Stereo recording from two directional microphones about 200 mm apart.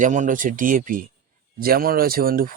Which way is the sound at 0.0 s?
40° right (ahead or behind).